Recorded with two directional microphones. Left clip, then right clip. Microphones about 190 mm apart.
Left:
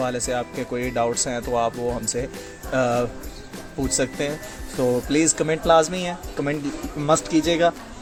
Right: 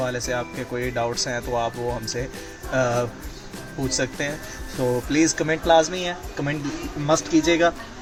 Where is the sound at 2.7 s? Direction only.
50° left (ahead or behind).